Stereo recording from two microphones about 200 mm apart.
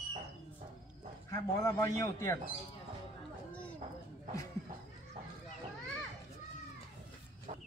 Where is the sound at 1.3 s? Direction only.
15° left (ahead or behind).